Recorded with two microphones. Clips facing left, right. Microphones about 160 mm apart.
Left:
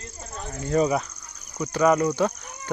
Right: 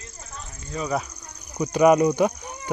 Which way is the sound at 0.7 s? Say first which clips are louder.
Left 9 dB; 65° left (ahead or behind).